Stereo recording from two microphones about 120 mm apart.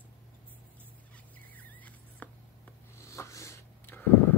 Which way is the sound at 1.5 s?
15° left (ahead or behind).